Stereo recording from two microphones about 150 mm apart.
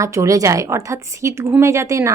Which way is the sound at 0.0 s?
20° right (ahead or behind).